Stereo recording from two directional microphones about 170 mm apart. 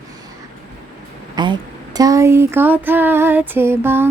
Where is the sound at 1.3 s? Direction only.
25° right (ahead or behind).